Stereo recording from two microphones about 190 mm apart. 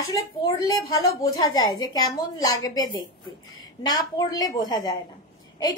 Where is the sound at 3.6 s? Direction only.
20° left (ahead or behind).